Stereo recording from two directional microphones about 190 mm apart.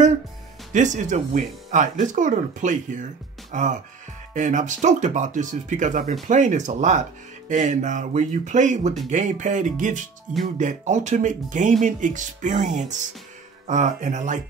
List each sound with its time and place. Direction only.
0.7 s speech: 40° right (ahead or behind)
13.7 s speech: 40° right (ahead or behind)